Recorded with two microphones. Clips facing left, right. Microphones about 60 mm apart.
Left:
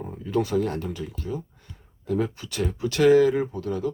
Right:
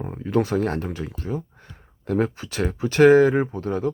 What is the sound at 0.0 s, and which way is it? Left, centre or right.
Speech, right.